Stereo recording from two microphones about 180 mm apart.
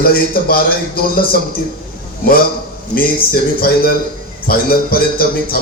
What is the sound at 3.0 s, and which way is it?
A man's voice, 55° left (ahead or behind).